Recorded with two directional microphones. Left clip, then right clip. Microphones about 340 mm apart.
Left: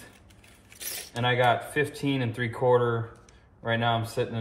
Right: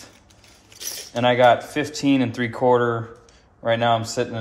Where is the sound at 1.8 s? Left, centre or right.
Right.